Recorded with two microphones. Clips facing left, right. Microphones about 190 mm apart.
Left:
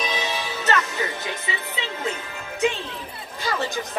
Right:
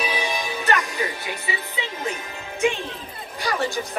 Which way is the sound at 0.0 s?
10° right (ahead or behind).